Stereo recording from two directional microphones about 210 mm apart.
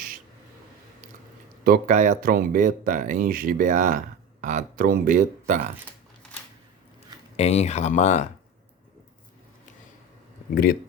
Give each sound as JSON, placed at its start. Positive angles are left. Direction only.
{"t": 1.6, "sound": "speech", "side_deg": -40}
{"t": 7.3, "sound": "speech", "side_deg": 30}
{"t": 10.5, "sound": "speech", "side_deg": 45}